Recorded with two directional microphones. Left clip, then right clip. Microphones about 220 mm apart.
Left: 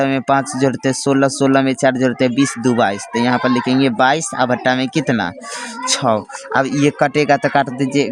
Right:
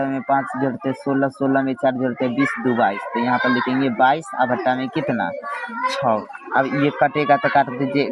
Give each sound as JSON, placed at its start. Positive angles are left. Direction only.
{"t": 0.0, "sound": "speech", "side_deg": 45}